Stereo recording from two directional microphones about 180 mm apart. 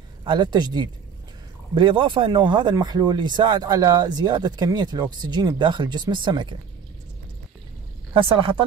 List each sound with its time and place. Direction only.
0.2 s speech: 25° right (ahead or behind)
8.1 s speech: 30° right (ahead or behind)